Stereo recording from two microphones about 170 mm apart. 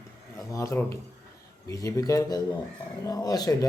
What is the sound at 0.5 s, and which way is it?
A man's voice, 15° left (ahead or behind).